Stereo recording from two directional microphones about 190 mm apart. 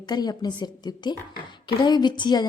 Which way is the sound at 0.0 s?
20° left (ahead or behind).